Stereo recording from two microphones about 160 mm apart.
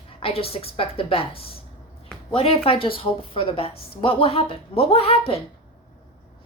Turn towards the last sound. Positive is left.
turn(degrees=40)  # may be behind; listen again after turning